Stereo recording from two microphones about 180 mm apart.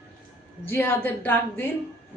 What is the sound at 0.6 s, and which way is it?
A woman's voice, 10° left (ahead or behind).